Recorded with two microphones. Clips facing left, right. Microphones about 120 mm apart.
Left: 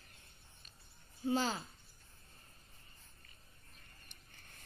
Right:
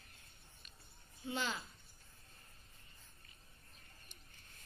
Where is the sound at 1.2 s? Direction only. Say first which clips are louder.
Left 6 dB; 35° left (ahead or behind).